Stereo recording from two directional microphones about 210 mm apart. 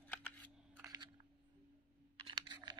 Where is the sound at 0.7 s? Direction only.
15° right (ahead or behind).